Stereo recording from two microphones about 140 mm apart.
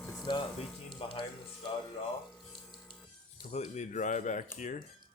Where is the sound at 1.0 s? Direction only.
35° left (ahead or behind).